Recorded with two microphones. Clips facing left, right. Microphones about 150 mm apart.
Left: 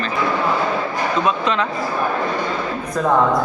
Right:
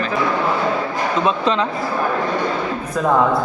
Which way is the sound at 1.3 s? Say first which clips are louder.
Right 1 dB; 30° right (ahead or behind).